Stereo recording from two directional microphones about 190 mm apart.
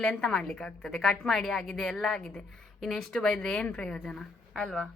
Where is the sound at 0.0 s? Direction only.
5° left (ahead or behind).